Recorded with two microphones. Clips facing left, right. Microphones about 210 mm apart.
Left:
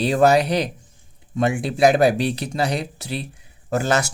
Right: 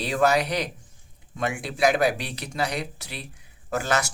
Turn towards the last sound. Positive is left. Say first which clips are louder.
# left 5 dB
turn(degrees=25)  # may be behind; listen again after turning